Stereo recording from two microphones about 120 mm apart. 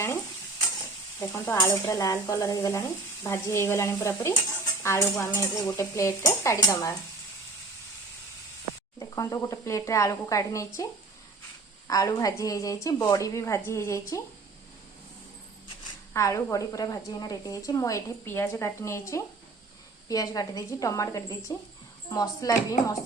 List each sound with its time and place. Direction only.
1.2 s sizzle: 25° left (ahead or behind)
9.0 s sizzle: 25° left (ahead or behind)
11.9 s sizzle: 30° left (ahead or behind)
16.1 s sizzle: 25° left (ahead or behind)